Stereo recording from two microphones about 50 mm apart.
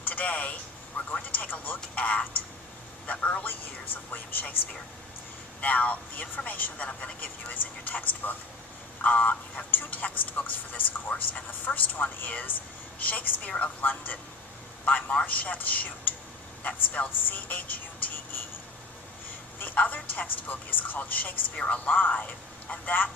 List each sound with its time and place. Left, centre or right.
0.0 s a sound: left
1.1 s a man's voice: left
19.5 s a man's voice: left